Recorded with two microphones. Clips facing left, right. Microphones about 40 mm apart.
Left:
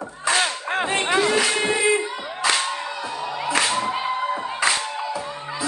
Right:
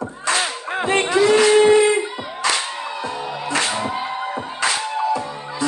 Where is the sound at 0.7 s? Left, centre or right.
Left.